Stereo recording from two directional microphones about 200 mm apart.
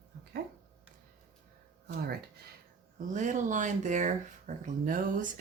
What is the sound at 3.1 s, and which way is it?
Speech, 40° right (ahead or behind).